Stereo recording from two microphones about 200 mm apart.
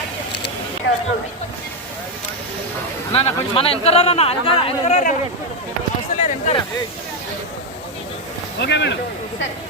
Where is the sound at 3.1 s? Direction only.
30° left (ahead or behind).